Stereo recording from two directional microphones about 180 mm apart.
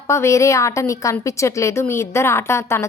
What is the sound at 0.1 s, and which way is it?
A woman's voice, 15° left (ahead or behind).